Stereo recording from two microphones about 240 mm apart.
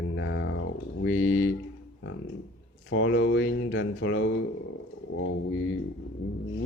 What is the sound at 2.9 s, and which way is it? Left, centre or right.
Speech, left.